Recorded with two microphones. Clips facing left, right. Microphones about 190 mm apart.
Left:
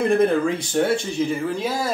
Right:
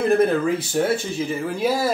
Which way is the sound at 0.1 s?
5° right (ahead or behind).